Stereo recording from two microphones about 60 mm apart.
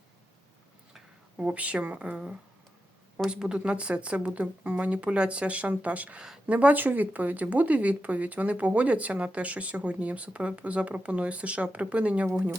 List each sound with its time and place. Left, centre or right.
1.4 s speech: right